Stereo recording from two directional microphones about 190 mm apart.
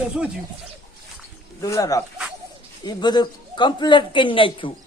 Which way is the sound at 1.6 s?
15° left (ahead or behind).